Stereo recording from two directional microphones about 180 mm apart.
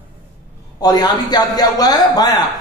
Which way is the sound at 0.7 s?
20° left (ahead or behind).